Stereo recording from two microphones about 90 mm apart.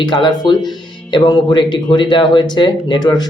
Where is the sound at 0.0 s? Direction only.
55° left (ahead or behind).